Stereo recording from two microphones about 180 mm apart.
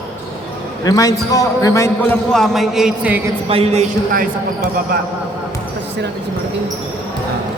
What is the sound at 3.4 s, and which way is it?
Speech, 35° right (ahead or behind).